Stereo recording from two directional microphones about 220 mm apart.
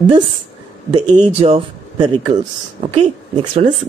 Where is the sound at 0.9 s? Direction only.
20° right (ahead or behind).